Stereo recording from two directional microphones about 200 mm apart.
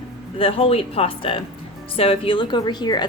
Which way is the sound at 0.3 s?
30° left (ahead or behind).